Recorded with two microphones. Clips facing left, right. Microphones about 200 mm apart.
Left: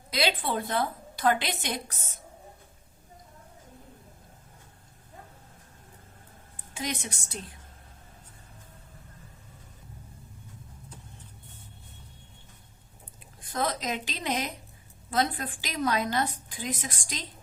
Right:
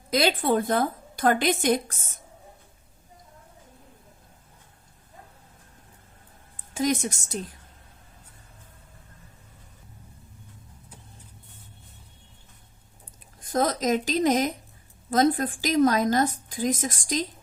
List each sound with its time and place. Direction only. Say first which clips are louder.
0.1 s a woman's voice: right 6 dB; 45° right (ahead or behind)
6.7 s a woman's voice: right 9 dB; 45° right (ahead or behind)
13.4 s a woman's voice: right 6 dB; 40° right (ahead or behind)